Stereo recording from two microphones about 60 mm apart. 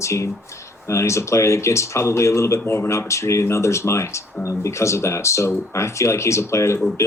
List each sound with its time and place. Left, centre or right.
0.0 s speech: left